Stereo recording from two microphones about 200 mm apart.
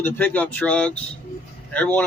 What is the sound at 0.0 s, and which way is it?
Speech, 10° left (ahead or behind).